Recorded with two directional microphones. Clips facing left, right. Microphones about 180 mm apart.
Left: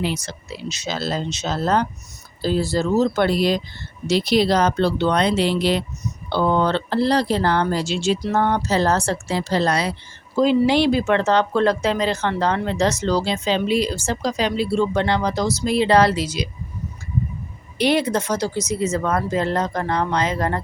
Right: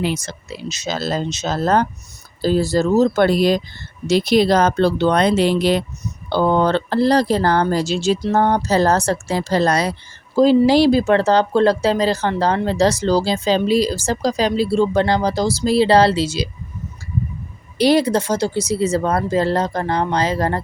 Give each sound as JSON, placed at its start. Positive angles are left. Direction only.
{"t": 0.0, "sound": "speech", "side_deg": -50}
{"t": 17.7, "sound": "speech", "side_deg": -35}